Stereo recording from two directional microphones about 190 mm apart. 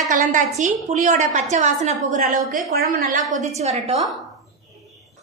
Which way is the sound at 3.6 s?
35° right (ahead or behind).